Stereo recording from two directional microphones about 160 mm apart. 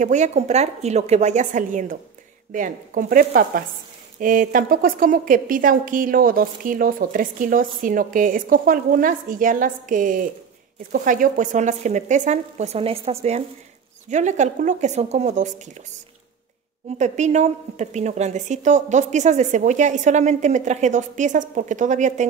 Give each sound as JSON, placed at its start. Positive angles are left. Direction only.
{"t": 0.0, "sound": "a woman's voice", "side_deg": -45}
{"t": 17.0, "sound": "a woman's voice", "side_deg": -45}